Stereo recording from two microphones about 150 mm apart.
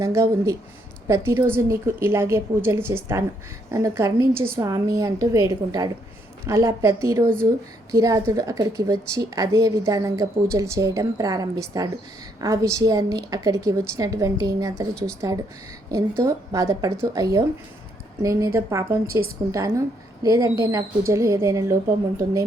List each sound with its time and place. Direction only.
0.0 s a woman's voice: 20° right (ahead or behind)